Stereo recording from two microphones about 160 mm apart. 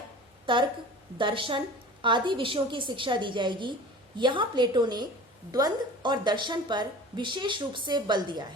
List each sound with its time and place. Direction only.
0.5 s a woman's voice: 30° right (ahead or behind)